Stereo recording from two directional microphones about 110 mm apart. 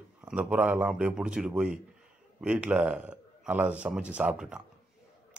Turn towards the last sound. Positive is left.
turn(degrees=-10)  # may be behind; listen again after turning